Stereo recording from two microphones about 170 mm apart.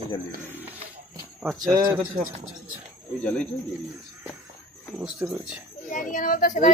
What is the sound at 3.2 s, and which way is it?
Speech, 5° left (ahead or behind).